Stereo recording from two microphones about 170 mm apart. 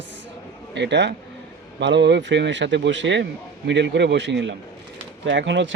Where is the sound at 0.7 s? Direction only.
90° right.